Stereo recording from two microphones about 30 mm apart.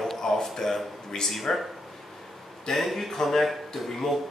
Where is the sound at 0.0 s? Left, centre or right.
Centre.